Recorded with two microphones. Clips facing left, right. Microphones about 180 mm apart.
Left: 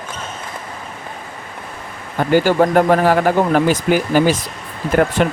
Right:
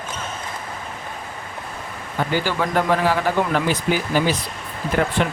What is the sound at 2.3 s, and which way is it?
Speech, 45° left (ahead or behind).